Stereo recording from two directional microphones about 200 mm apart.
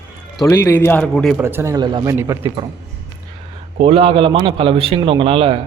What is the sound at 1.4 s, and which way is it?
A man's voice, 10° right (ahead or behind).